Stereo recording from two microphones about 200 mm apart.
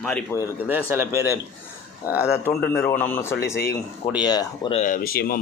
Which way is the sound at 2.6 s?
50° left (ahead or behind).